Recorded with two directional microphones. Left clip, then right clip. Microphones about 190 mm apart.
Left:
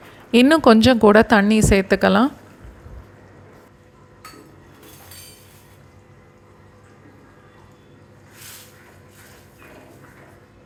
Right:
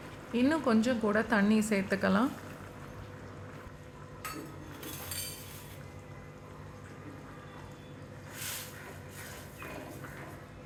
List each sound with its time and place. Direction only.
0.3 s a woman's voice: 45° left (ahead or behind)